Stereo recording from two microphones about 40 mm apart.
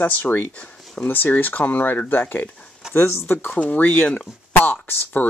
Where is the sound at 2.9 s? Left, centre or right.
Left.